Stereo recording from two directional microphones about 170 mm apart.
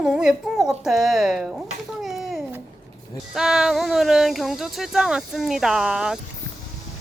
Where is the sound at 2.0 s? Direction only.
Centre (ahead or behind).